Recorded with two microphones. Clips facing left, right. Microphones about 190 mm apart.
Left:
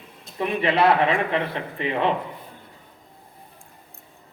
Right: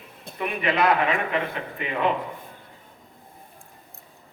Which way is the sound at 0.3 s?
30° left (ahead or behind).